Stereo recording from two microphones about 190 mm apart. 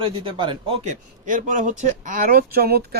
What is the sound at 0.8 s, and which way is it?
Speech, 40° right (ahead or behind).